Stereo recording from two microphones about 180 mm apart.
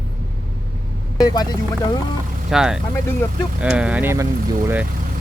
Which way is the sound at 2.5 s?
5° right (ahead or behind).